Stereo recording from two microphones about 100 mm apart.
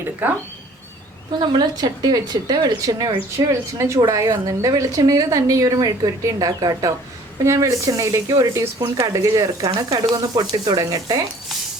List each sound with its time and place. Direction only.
0.0 s a sound: 20° right (ahead or behind)
1.4 s a woman's voice: 45° right (ahead or behind)
3.2 s a woman's voice: 25° right (ahead or behind)